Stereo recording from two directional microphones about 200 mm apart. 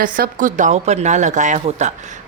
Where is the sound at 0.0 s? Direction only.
40° right (ahead or behind).